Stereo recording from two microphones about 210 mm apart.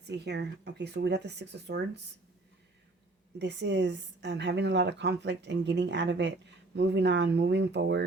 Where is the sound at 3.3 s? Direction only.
55° right (ahead or behind).